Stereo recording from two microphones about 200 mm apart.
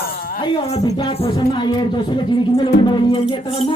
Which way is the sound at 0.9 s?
20° left (ahead or behind).